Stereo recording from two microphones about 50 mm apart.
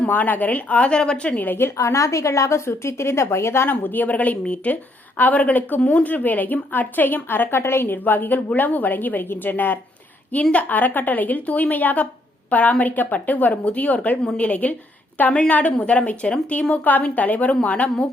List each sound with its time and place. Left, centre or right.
0.1 s a woman's voice: left
1.8 s a woman's voice: left
2.6 s a woman's voice: left
3.7 s a woman's voice: left